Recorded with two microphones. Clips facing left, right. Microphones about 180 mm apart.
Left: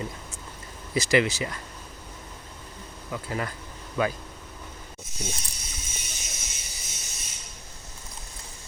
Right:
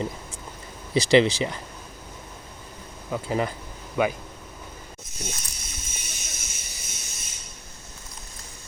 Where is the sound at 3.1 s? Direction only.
20° right (ahead or behind).